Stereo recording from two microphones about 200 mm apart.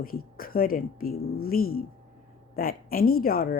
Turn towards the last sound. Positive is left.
turn(degrees=45)  # may be behind; listen again after turning